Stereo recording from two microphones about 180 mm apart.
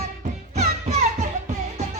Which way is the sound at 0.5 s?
40° right (ahead or behind).